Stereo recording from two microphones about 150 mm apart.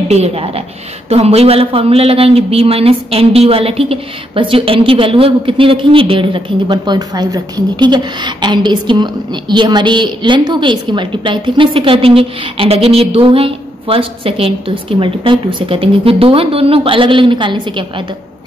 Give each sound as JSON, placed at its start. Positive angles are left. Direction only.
{"t": 0.1, "sound": "a woman's voice", "side_deg": -45}